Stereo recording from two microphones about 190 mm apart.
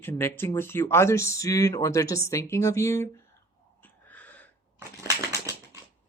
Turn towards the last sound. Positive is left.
turn(degrees=-15)  # may be behind; listen again after turning